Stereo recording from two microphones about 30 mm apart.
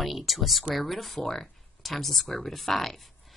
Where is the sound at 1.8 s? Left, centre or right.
Centre.